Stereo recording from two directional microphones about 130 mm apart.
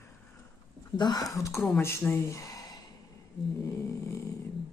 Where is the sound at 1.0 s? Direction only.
30° left (ahead or behind).